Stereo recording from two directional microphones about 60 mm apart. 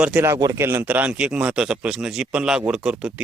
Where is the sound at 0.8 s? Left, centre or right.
Right.